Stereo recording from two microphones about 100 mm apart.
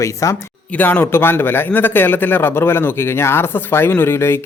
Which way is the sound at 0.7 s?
15° left (ahead or behind).